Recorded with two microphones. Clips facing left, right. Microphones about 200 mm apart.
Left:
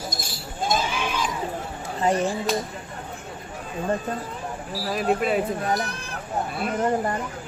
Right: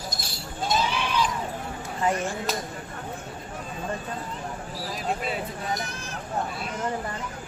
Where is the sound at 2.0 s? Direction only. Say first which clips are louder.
Left 4 dB; 30° left (ahead or behind).